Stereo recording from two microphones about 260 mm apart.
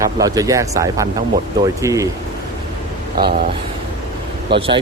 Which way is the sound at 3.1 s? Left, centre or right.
Right.